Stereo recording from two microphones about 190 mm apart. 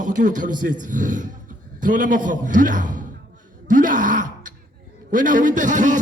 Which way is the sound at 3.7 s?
45° right (ahead or behind).